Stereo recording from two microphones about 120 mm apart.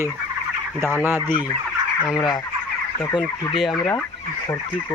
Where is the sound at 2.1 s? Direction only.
35° left (ahead or behind).